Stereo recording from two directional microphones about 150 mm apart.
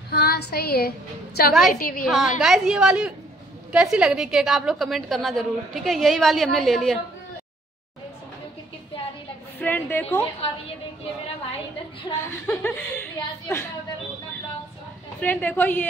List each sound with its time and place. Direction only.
0.1 s a woman's voice: 90° left
1.7 s a woman's voice: 70° left (ahead or behind)
2.0 s a woman's voice: centre (ahead or behind)
9.6 s a woman's voice: 10° left (ahead or behind)
12.1 s speech: 25° left (ahead or behind)
12.6 s speech: 15° left (ahead or behind)
15.1 s a woman's voice: 10° left (ahead or behind)